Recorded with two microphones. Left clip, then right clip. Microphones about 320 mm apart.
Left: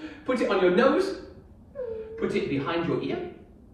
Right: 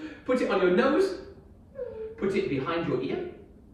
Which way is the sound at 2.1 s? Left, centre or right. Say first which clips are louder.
Even; centre.